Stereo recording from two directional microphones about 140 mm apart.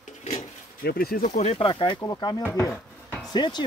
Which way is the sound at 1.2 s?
50° left (ahead or behind).